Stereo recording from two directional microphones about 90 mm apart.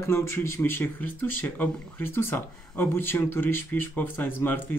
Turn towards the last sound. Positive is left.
turn(degrees=20)  # may be behind; listen again after turning